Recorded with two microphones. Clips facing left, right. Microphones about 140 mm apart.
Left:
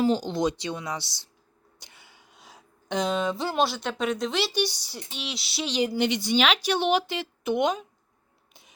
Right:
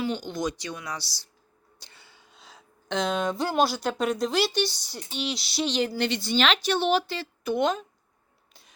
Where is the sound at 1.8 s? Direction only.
15° left (ahead or behind); by 4.5 s centre (ahead or behind).